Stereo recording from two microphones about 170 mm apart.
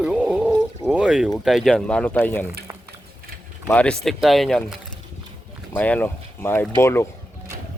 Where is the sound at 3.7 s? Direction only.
5° left (ahead or behind).